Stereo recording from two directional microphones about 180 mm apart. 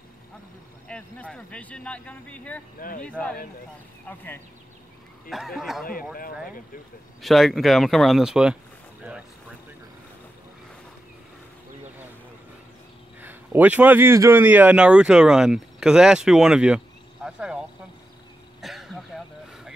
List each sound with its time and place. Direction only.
0.8 s speech: 5° left (ahead or behind)
2.8 s speech: 50° left (ahead or behind)
3.1 s speech: 5° left (ahead or behind)
5.3 s speech: centre (ahead or behind)
7.2 s speech: centre (ahead or behind)
13.2 s a man's voice: 10° right (ahead or behind)
18.6 s throat clearing: centre (ahead or behind)